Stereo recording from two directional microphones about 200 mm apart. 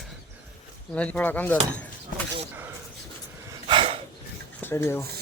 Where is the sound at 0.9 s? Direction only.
5° left (ahead or behind).